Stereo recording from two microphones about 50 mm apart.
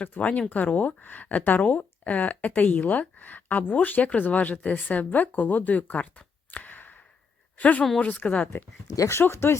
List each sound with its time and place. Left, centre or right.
0.0 s speech: left
8.9 s speech: left
9.3 s speech: left